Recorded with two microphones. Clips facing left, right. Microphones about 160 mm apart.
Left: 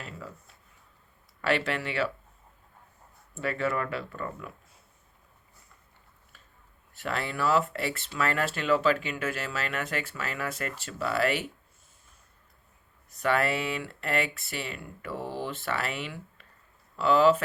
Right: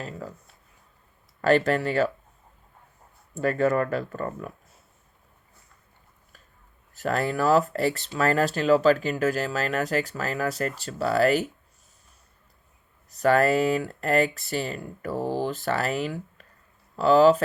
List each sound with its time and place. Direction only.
0.0 s speech: 40° right (ahead or behind)
1.4 s speech: 40° right (ahead or behind)
3.3 s speech: 40° right (ahead or behind)
7.0 s speech: 45° right (ahead or behind)
13.1 s speech: 40° right (ahead or behind)